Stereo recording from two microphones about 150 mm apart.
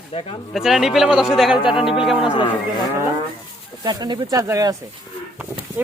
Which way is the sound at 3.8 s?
25° right (ahead or behind).